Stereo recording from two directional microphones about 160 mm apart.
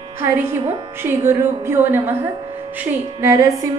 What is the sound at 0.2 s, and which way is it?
A woman's voice, 15° right (ahead or behind).